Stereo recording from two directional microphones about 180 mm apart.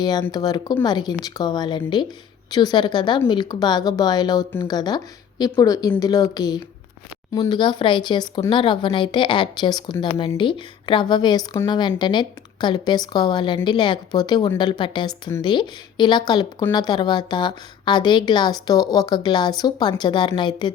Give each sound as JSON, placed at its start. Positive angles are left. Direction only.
{"t": 0.0, "sound": "speech", "side_deg": 20}